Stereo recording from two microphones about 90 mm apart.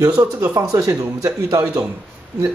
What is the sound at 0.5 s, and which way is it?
A man's voice, 40° right (ahead or behind).